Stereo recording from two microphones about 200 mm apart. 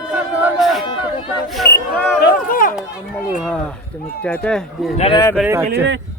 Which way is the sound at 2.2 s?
45° left (ahead or behind).